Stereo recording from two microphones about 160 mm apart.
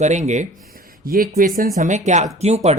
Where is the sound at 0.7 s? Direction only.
65° right (ahead or behind).